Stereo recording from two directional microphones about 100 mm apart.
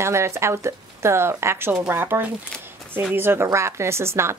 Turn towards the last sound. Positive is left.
turn(degrees=-25)  # may be behind; listen again after turning